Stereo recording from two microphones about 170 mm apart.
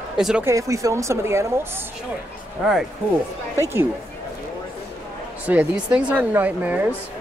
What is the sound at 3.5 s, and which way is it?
Speech, 15° right (ahead or behind).